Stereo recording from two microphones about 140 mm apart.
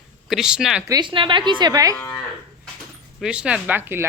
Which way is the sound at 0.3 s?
5° right (ahead or behind).